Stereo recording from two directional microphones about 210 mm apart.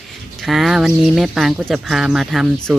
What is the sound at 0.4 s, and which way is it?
Speech, centre (ahead or behind).